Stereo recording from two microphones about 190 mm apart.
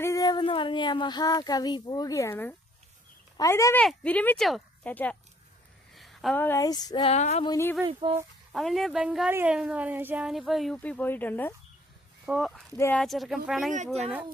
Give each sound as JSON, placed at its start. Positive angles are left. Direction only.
{"t": 0.0, "sound": "speech", "side_deg": 15}
{"t": 7.4, "sound": "speech", "side_deg": 15}
{"t": 7.9, "sound": "speech", "side_deg": -30}
{"t": 8.5, "sound": "a woman's voice", "side_deg": 0}
{"t": 12.2, "sound": "speech", "side_deg": -5}
{"t": 12.7, "sound": "speech", "side_deg": 15}
{"t": 13.0, "sound": "a woman's voice", "side_deg": 0}